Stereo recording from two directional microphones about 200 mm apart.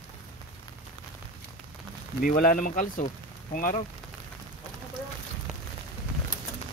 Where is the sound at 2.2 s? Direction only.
45° left (ahead or behind).